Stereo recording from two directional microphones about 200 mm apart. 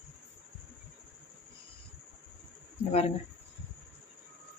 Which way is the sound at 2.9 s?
30° left (ahead or behind).